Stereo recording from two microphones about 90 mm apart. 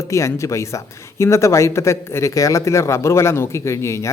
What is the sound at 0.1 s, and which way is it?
Speech, 35° left (ahead or behind).